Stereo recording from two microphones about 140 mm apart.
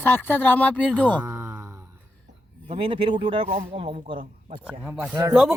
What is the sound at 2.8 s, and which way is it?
Speech, 40° right (ahead or behind).